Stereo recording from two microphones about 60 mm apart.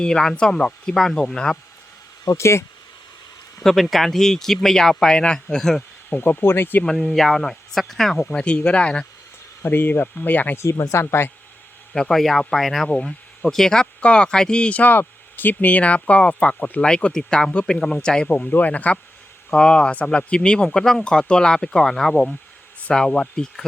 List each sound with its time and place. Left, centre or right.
0.0 s speech: centre
2.4 s speech: left
3.6 s speech: centre
6.1 s speech: left
7.0 s speech: centre
9.6 s speech: left
10.6 s speech: left
11.9 s speech: centre
14.8 s speech: left; by 18.5 s centre
18.5 s speech: left
19.5 s speech: centre